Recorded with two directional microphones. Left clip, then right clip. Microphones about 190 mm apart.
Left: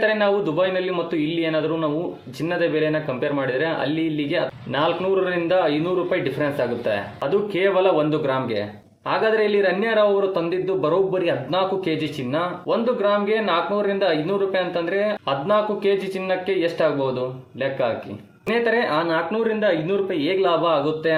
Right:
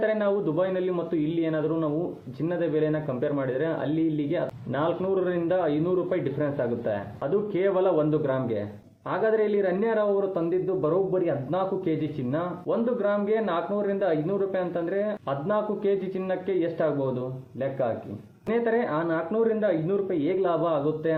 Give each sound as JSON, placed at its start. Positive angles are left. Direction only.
{"t": 0.0, "sound": "a man's voice", "side_deg": 20}